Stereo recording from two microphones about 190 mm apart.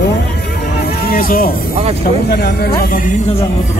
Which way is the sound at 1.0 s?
50° left (ahead or behind).